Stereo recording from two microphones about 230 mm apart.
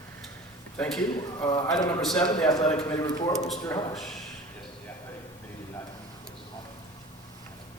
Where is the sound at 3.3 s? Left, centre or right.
Centre.